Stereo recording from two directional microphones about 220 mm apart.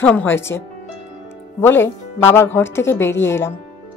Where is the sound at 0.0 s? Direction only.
5° left (ahead or behind).